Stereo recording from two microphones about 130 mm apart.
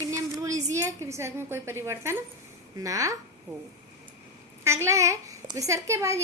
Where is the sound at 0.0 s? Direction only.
25° right (ahead or behind).